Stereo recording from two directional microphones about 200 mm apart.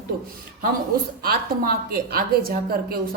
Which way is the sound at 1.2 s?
50° right (ahead or behind).